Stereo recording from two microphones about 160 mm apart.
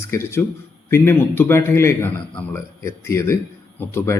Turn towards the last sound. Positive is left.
turn(degrees=15)  # may be behind; listen again after turning